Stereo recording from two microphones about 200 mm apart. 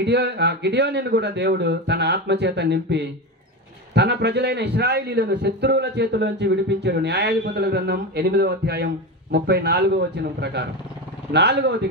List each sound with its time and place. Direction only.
0.0 s a man's voice: 55° right (ahead or behind)